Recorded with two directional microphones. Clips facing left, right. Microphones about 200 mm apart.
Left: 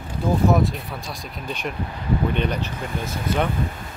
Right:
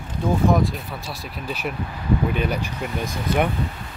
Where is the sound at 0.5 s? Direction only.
Centre (ahead or behind).